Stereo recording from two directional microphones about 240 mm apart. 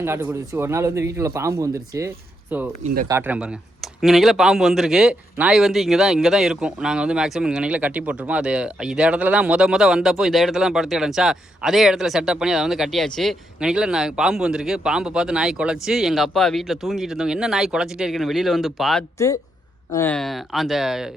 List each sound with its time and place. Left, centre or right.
0.0 s speech: centre
2.8 s speech: right
3.1 s speech: centre